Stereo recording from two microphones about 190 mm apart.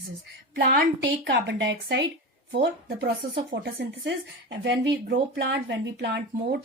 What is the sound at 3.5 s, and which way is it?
Speech, 75° right (ahead or behind).